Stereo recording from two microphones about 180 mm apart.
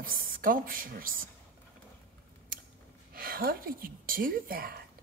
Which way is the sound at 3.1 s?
55° right (ahead or behind).